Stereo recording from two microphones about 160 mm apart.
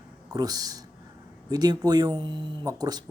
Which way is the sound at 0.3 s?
25° right (ahead or behind).